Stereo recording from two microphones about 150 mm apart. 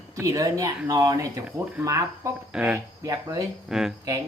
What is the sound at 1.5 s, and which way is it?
Speech, 10° right (ahead or behind).